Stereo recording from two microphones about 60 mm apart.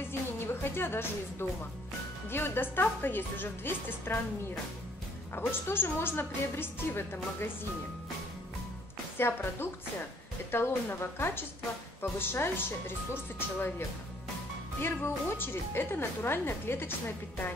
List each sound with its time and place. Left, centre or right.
0.6 s music: left
1.4 s a woman's voice: left
5.3 s a woman's voice: left
9.2 s a woman's voice: left